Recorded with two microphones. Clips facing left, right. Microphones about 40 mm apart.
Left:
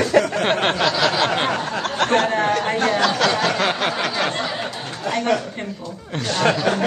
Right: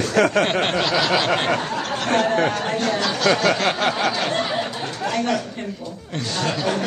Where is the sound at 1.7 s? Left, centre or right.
Left.